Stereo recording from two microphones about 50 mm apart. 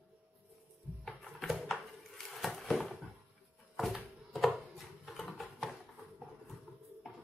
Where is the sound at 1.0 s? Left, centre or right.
Centre.